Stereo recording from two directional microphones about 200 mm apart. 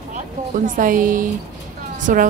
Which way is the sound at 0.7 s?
40° right (ahead or behind).